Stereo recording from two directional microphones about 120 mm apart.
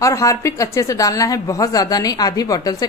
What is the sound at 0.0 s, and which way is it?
Speech, 25° left (ahead or behind).